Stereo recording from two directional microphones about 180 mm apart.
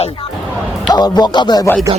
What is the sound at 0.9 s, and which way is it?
Speech, 25° left (ahead or behind).